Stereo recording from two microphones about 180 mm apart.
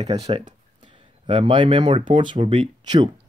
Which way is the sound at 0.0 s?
35° right (ahead or behind).